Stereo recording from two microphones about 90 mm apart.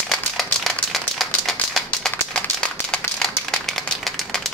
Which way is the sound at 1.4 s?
Centre (ahead or behind).